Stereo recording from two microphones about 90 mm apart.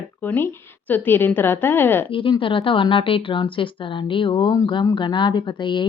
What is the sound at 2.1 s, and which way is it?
A woman's voice, 75° left (ahead or behind).